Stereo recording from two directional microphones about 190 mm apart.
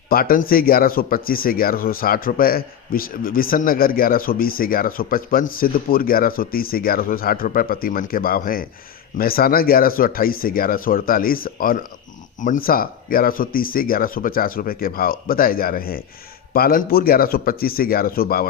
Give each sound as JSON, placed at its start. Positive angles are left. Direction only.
{"t": 0.1, "sound": "speech", "side_deg": 50}